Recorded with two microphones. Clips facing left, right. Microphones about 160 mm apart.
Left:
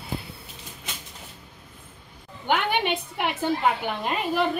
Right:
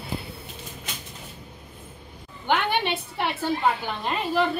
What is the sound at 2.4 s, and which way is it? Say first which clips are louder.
A woman's voice: even; 15° left (ahead or behind).